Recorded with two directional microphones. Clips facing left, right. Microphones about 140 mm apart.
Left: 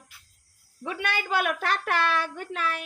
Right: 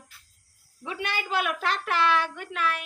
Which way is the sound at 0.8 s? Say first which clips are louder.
Left 2 dB; 50° left (ahead or behind).